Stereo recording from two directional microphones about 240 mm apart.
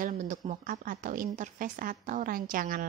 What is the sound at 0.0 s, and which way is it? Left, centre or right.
Speech, right.